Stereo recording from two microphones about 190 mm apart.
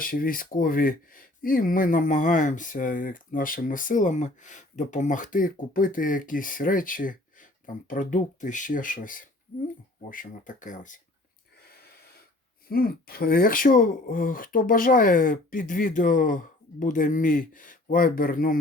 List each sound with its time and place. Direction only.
0.0 s speech: 45° left (ahead or behind)
12.6 s speech: 50° left (ahead or behind)